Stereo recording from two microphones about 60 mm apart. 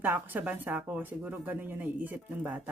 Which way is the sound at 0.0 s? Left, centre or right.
Right.